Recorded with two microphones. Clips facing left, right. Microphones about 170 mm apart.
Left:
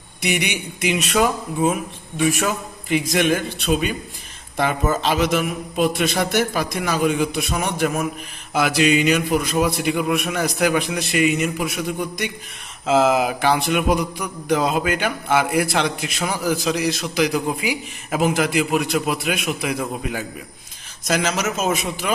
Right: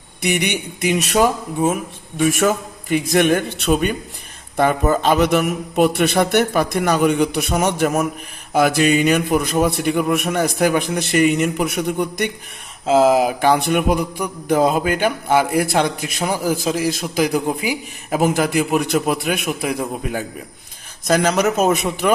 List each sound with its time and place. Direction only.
0.3 s mantra: 50° right (ahead or behind)
4.5 s a man's voice: 50° right (ahead or behind)
8.5 s mantra: 50° right (ahead or behind)
12.8 s mantra: 35° right (ahead or behind)
21.1 s a man's voice: 50° right (ahead or behind)